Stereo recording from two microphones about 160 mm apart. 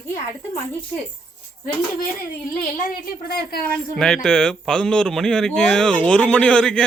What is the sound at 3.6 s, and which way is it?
Speech, 5° left (ahead or behind).